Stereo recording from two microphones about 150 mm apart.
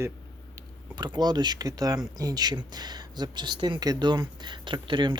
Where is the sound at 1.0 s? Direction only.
30° right (ahead or behind).